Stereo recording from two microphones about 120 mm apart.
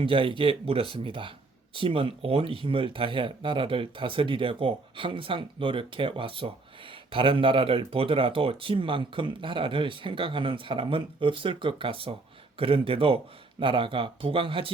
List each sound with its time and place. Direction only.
0.0 s speech: 45° right (ahead or behind)